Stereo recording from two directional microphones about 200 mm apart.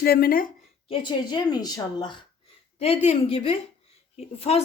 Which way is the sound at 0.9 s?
25° left (ahead or behind).